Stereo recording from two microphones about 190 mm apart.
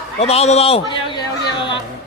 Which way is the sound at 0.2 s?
35° left (ahead or behind).